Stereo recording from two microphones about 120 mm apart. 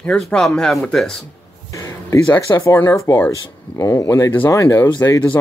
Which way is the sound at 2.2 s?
20° left (ahead or behind).